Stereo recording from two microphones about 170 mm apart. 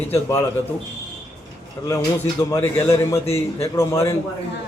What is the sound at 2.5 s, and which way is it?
A man's voice, 15° left (ahead or behind).